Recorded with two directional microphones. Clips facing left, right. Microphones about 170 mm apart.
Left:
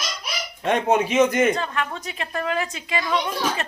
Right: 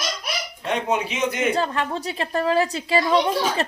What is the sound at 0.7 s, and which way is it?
Speech, 50° left (ahead or behind).